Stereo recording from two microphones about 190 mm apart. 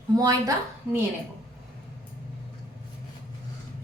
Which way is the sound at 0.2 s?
20° right (ahead or behind).